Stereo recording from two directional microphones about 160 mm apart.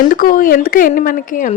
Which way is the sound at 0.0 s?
60° left (ahead or behind).